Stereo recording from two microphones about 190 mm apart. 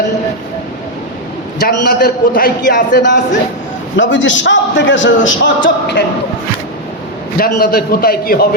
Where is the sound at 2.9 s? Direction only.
70° left (ahead or behind).